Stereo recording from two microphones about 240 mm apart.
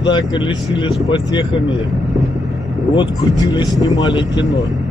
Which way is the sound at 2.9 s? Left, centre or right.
Centre.